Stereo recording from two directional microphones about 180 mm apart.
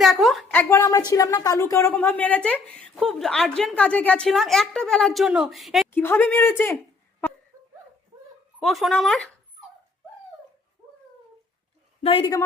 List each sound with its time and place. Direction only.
0.0 s a woman's voice: centre (ahead or behind)
5.9 s a woman's voice: 10° left (ahead or behind)
8.5 s a woman's voice: centre (ahead or behind)
12.0 s a woman's voice: 30° left (ahead or behind)